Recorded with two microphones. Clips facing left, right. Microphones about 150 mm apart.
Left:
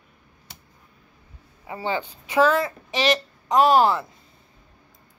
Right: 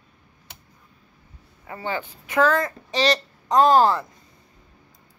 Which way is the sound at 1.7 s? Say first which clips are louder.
Left 2 dB; 15° left (ahead or behind).